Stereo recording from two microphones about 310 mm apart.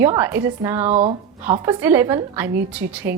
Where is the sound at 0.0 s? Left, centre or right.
Centre.